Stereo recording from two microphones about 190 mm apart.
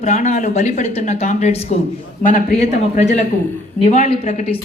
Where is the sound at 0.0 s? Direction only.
40° left (ahead or behind).